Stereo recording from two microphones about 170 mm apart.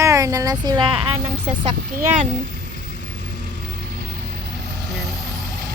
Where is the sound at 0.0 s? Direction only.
20° right (ahead or behind).